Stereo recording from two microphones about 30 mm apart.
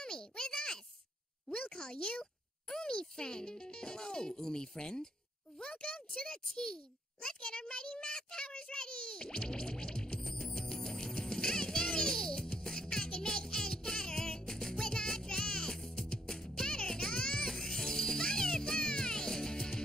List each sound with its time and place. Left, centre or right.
0.0 s a sound: left
1.5 s a child's voice: left
10.1 s music: centre